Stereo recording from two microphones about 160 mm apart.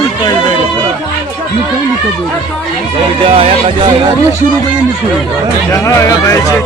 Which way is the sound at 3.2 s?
35° right (ahead or behind).